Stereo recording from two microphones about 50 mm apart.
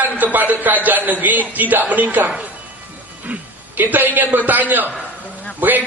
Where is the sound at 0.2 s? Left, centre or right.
Right.